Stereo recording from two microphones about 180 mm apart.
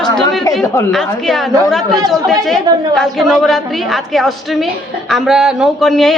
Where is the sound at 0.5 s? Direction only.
20° left (ahead or behind).